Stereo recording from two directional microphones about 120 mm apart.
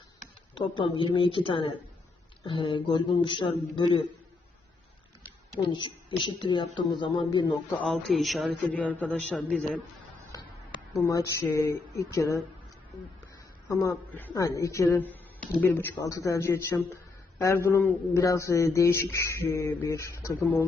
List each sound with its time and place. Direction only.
0.5 s speech: 45° left (ahead or behind)
5.5 s a woman's voice: 40° left (ahead or behind)
7.9 s a man's voice: centre (ahead or behind)
10.3 s a sound: 30° left (ahead or behind)
11.0 s speech: 25° left (ahead or behind)
14.3 s speech: 25° left (ahead or behind)